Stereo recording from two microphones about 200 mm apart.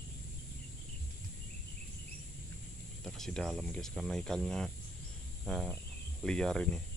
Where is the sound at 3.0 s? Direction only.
5° left (ahead or behind).